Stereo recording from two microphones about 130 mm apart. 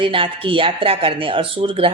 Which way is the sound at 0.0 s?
45° right (ahead or behind).